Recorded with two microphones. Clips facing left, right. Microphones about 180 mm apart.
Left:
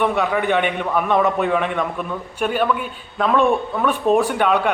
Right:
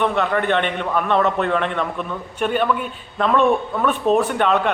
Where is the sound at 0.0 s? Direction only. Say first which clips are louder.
Even; 10° left (ahead or behind).